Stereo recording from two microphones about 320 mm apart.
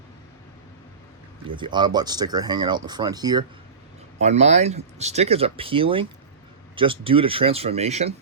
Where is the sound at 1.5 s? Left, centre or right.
Centre.